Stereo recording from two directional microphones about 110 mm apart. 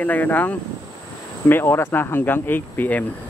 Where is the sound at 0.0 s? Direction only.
15° left (ahead or behind).